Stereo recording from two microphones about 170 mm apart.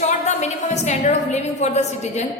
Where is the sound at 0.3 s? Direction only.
40° left (ahead or behind).